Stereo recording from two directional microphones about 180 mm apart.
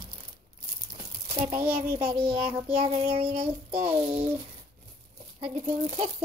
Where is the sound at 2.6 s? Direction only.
35° right (ahead or behind).